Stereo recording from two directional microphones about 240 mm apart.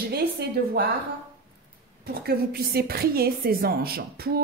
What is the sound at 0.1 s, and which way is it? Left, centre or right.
Speech, right.